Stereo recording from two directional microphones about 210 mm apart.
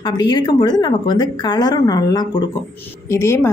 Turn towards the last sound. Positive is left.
turn(degrees=10)  # may be behind; listen again after turning